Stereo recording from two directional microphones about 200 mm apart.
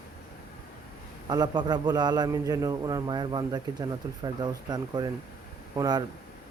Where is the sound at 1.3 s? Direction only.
20° right (ahead or behind).